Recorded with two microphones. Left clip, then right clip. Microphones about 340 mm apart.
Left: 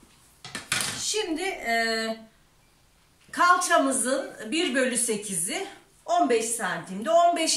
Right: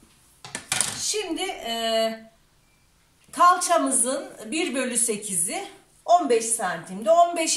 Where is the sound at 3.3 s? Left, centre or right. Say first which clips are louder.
Right 2 dB; centre.